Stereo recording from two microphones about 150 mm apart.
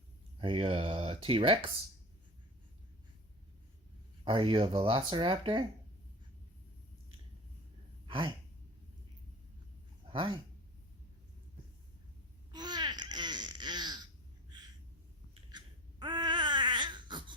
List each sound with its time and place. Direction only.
0.3 s speech: 35° right (ahead or behind)
4.2 s speech: 35° right (ahead or behind)
8.0 s gasp: 35° right (ahead or behind)
10.1 s speech: 35° right (ahead or behind)
12.5 s a sound: 30° right (ahead or behind)
15.5 s babbling: 30° right (ahead or behind)